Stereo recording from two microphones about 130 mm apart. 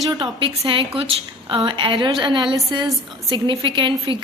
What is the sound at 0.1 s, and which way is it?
A woman's voice, 40° right (ahead or behind).